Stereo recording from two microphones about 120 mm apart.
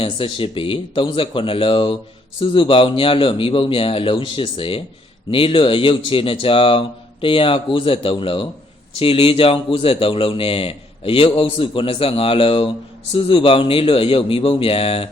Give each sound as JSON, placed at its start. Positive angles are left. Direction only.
{"t": 0.0, "sound": "a man's voice", "side_deg": 50}